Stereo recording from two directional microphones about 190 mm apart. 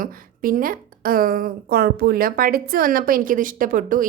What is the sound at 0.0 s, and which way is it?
Speech, 45° right (ahead or behind).